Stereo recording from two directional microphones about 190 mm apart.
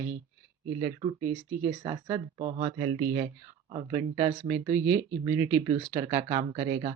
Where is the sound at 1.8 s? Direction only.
20° right (ahead or behind).